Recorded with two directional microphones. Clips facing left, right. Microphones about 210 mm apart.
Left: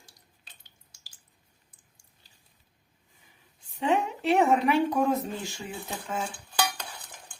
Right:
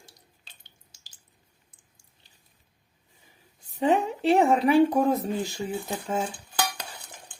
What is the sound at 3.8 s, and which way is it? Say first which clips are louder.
Speech: right 3 dB; 35° right (ahead or behind).